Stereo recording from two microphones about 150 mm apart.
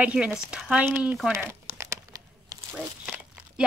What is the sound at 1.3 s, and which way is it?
Crumpling, 15° right (ahead or behind).